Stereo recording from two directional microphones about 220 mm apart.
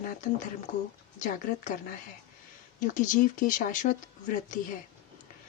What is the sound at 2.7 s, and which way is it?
A woman's voice, 35° left (ahead or behind).